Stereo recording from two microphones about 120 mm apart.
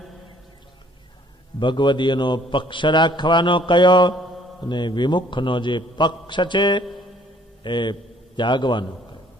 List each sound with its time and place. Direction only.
1.6 s a man's voice: 40° left (ahead or behind)